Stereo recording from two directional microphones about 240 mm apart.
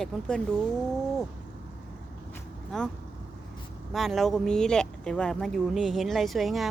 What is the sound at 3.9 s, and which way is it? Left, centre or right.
Speech, centre.